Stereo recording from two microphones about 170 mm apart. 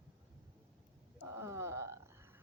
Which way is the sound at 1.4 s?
15° right (ahead or behind).